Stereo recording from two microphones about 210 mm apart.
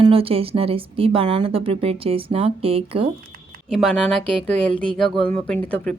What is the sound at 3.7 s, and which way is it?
Speech, 5° left (ahead or behind).